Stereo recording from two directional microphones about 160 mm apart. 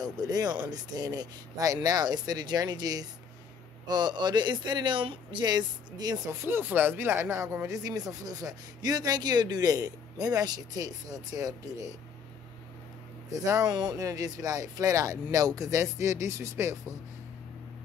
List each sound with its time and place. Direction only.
0.0 s speech: 25° right (ahead or behind)
13.3 s speech: 20° right (ahead or behind)